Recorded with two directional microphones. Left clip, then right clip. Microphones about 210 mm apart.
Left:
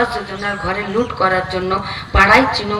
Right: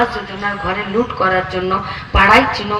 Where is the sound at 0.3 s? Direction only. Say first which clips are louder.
Right 3 dB; 40° right (ahead or behind).